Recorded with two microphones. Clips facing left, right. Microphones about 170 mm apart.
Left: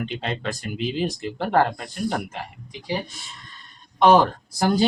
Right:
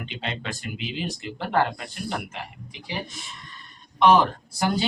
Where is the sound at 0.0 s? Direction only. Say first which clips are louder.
Left 5 dB; 40° left (ahead or behind).